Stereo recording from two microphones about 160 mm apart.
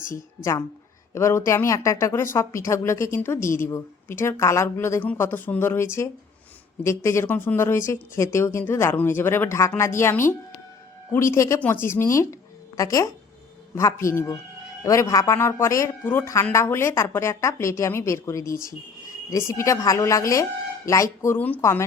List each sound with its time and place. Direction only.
1.1 s a woman's voice: 15° left (ahead or behind)